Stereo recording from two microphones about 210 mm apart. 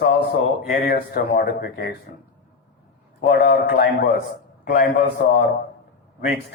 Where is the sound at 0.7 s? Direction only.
45° left (ahead or behind).